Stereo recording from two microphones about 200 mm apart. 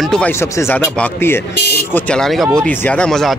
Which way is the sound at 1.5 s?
55° left (ahead or behind).